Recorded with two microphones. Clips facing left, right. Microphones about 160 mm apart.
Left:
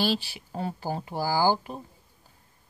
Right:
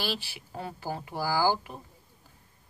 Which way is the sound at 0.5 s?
30° left (ahead or behind).